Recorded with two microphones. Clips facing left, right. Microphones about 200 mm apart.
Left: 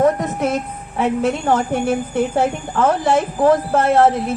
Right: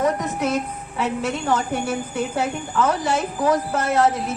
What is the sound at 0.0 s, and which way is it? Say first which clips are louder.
A woman's voice: left 5 dB; 50° left (ahead or behind).